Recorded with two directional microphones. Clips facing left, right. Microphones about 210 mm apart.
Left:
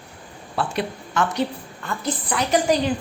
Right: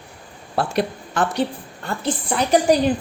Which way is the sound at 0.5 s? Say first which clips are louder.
Right 4 dB; 35° right (ahead or behind).